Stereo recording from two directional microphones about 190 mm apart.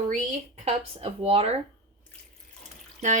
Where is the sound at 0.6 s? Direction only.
30° right (ahead or behind).